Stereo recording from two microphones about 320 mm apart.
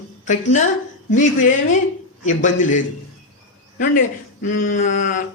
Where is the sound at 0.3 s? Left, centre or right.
Left.